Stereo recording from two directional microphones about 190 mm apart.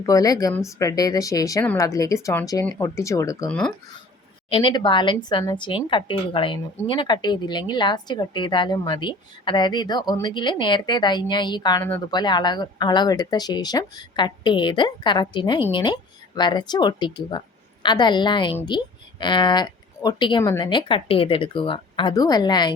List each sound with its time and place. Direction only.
0.0 s speech: 20° left (ahead or behind)